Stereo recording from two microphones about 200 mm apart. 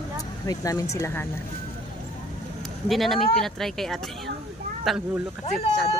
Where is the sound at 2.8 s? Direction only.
Centre (ahead or behind).